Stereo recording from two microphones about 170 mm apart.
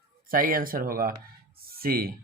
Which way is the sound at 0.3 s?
55° right (ahead or behind).